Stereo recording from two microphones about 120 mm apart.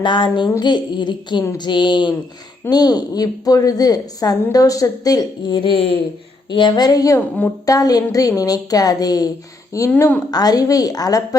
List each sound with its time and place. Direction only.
0.0 s a woman's voice: 40° left (ahead or behind)
6.5 s a woman's voice: 40° left (ahead or behind)
7.2 s a woman's voice: 15° left (ahead or behind)
7.6 s a sound: 30° left (ahead or behind)
8.4 s a woman's voice: 30° left (ahead or behind)
9.9 s a woman's voice: 15° left (ahead or behind)
10.3 s a woman's voice: 30° left (ahead or behind)